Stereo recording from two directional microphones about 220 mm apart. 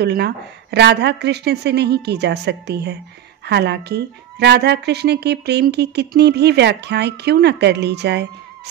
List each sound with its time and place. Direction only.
0.0 s a woman's voice: 50° right (ahead or behind)